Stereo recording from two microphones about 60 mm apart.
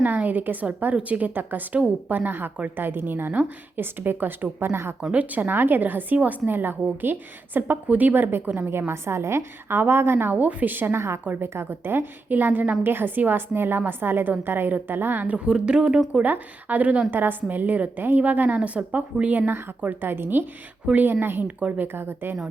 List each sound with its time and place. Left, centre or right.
0.0 s a woman's voice: right
5.1 s a woman's voice: right
8.9 s a woman's voice: right
15.4 s speech: centre
16.2 s a woman's voice: right